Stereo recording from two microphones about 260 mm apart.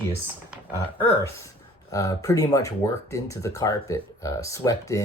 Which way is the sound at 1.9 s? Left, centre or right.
Centre.